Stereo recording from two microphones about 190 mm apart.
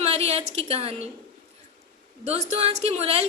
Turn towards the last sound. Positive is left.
turn(degrees=-30)  # may be behind; listen again after turning